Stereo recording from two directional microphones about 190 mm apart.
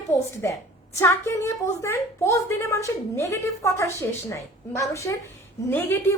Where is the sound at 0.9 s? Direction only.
15° left (ahead or behind).